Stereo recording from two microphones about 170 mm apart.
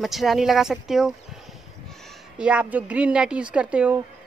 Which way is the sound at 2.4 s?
5° right (ahead or behind).